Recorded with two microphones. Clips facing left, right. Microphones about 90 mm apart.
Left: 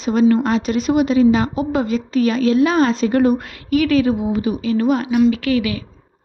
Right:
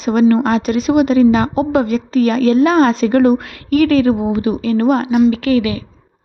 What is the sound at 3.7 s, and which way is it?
Speech, 45° right (ahead or behind).